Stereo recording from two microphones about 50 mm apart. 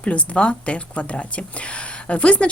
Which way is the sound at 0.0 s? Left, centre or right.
Left.